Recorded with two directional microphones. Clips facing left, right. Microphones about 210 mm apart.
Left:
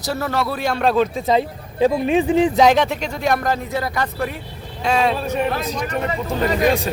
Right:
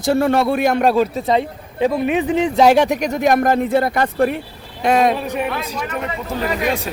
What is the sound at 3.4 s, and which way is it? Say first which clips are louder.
Speech: right 6 dB; 55° right (ahead or behind).